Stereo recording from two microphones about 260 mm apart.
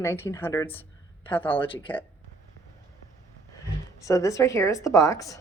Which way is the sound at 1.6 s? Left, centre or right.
Centre.